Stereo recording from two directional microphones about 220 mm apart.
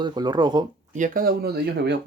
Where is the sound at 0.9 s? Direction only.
40° right (ahead or behind).